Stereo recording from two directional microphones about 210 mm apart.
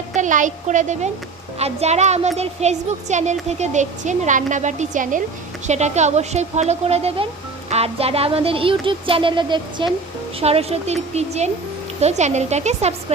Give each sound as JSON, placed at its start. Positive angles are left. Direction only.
{"t": 0.1, "sound": "a woman's voice", "side_deg": -35}